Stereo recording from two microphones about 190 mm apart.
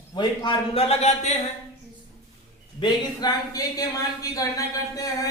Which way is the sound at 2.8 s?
20° left (ahead or behind).